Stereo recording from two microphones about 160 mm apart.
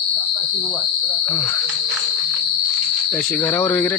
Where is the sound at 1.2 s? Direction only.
15° left (ahead or behind).